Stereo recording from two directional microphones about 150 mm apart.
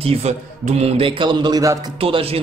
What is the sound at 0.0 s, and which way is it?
A man's voice, 40° right (ahead or behind).